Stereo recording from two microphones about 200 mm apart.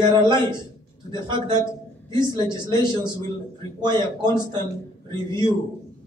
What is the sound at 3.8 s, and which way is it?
Speech, 20° right (ahead or behind).